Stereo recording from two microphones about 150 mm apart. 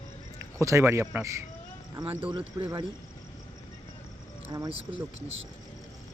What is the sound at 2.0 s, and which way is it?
Speech, 35° right (ahead or behind).